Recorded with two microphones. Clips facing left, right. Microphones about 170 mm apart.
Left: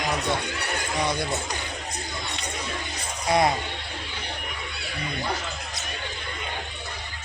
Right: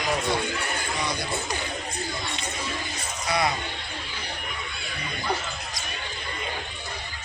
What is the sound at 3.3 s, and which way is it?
Speech, 45° left (ahead or behind).